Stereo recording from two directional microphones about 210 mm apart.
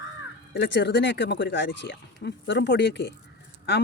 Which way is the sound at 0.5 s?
55° left (ahead or behind).